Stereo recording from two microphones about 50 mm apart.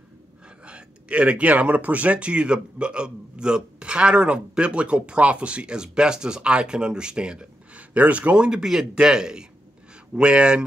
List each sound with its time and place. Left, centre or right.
0.7 s a man's voice: right